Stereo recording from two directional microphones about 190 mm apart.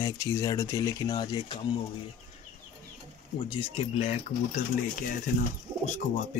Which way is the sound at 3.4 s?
30° left (ahead or behind).